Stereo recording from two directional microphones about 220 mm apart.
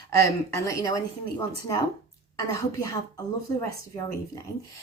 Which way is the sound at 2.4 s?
15° left (ahead or behind).